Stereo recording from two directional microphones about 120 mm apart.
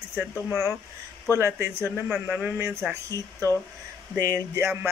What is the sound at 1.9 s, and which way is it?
Speech, 5° right (ahead or behind).